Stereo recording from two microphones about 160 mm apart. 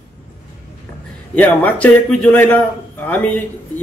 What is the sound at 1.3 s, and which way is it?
A man's voice, 10° left (ahead or behind).